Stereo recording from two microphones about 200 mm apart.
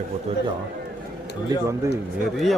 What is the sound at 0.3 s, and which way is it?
Speech, 30° right (ahead or behind).